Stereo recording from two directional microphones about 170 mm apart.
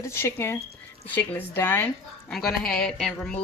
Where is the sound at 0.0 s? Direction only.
15° left (ahead or behind).